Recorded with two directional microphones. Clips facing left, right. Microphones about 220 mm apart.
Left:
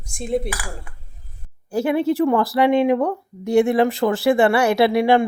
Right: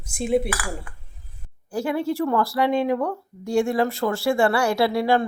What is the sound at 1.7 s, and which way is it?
Speech, 25° left (ahead or behind).